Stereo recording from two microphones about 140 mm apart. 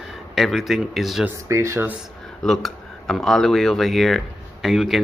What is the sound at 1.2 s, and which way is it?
Speech, 20° right (ahead or behind).